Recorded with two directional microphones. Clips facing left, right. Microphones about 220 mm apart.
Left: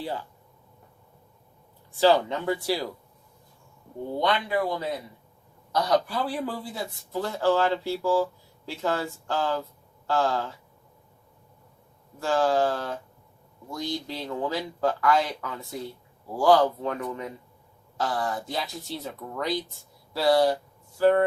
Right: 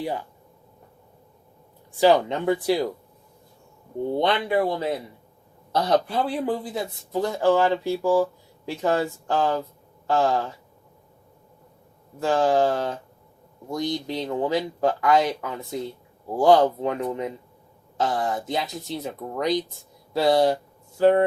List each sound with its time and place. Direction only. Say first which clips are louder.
0.0 s speech: right 4 dB; 15° right (ahead or behind)
2.0 s speech: right 3 dB; 15° right (ahead or behind)
4.2 s speech: right 3 dB; 25° right (ahead or behind)
12.2 s speech: right 3 dB; 20° right (ahead or behind)